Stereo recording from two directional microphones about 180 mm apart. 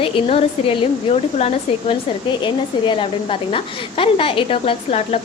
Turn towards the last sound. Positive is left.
turn(degrees=35)  # may be behind; listen again after turning